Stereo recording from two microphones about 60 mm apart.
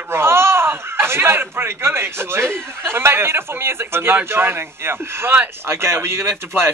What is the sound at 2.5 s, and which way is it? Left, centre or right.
A man's voice, right.